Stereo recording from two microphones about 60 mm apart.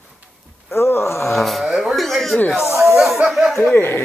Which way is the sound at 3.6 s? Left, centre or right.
Left.